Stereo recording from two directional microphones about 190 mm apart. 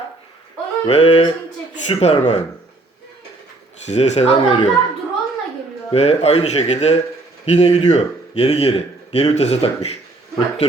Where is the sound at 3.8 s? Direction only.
35° left (ahead or behind).